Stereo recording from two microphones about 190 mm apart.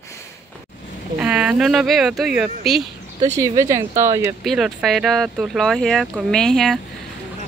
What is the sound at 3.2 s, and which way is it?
Speech, 20° right (ahead or behind).